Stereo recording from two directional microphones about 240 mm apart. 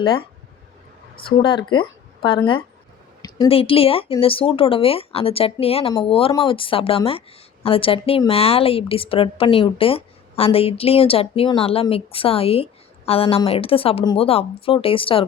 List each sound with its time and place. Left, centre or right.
0.0 s speech: centre
1.4 s speech: centre